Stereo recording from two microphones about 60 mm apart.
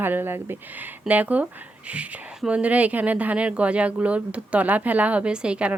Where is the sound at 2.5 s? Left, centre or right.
Right.